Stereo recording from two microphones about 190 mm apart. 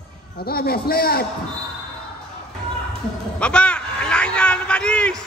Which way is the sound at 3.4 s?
5° left (ahead or behind).